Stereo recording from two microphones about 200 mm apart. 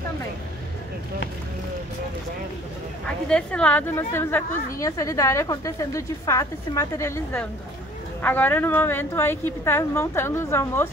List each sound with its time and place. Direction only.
3.3 s a woman's voice: 5° left (ahead or behind)